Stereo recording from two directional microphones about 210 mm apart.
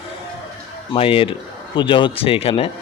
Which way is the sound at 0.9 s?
25° left (ahead or behind).